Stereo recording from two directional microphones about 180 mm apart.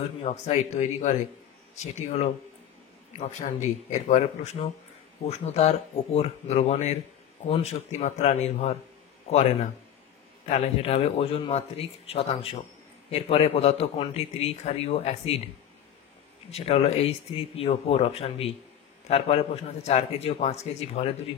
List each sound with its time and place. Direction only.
0.2 s a man's voice: 40° left (ahead or behind)